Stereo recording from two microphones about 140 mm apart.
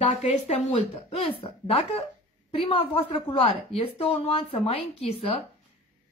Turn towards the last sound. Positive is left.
turn(degrees=45)  # may be behind; listen again after turning